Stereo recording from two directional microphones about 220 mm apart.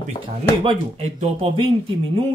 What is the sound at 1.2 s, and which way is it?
Speech, 25° right (ahead or behind).